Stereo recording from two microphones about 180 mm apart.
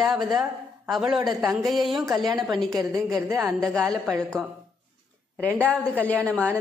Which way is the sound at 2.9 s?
20° right (ahead or behind).